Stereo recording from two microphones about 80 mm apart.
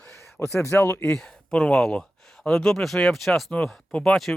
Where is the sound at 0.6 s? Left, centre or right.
Left.